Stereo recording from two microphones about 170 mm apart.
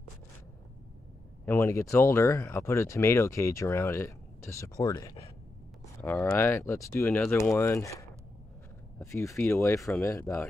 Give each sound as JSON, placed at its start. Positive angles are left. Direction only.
{"t": 1.4, "sound": "speech", "side_deg": 15}
{"t": 6.0, "sound": "speech", "side_deg": 10}